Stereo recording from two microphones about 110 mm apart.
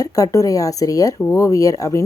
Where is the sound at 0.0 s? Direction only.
30° left (ahead or behind).